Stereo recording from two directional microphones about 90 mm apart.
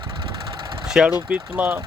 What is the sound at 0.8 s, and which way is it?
Vehicle, 5° right (ahead or behind).